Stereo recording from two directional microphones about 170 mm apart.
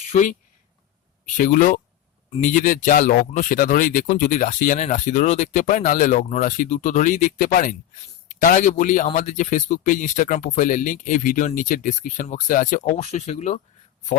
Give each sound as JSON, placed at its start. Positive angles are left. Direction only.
{"t": 0.1, "sound": "speech", "side_deg": 45}
{"t": 1.4, "sound": "a man's voice", "side_deg": 50}
{"t": 13.0, "sound": "speech", "side_deg": 40}